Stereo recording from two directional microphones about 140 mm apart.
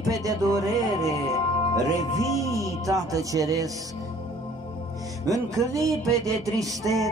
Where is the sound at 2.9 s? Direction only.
25° right (ahead or behind).